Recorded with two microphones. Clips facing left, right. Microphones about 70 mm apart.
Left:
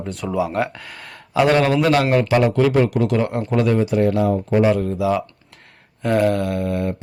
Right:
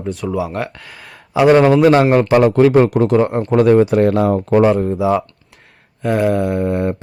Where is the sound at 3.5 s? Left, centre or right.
Right.